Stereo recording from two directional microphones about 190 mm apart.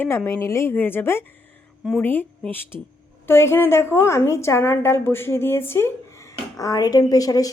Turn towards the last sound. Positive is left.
turn(degrees=20)  # may be behind; listen again after turning